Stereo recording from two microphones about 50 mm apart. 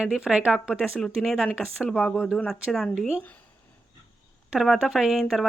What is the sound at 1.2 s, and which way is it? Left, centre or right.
Speech, centre.